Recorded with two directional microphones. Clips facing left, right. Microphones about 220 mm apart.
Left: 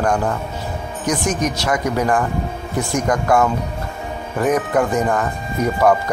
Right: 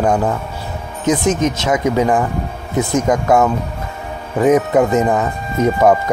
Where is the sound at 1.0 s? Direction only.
25° right (ahead or behind).